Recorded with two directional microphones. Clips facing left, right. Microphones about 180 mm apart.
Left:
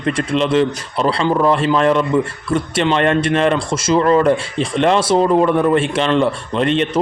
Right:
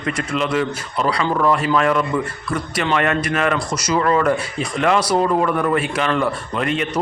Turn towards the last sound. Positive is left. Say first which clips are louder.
# left 4 dB
turn(degrees=25)  # may be behind; listen again after turning